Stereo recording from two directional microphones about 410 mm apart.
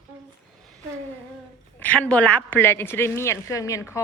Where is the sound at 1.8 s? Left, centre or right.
Centre.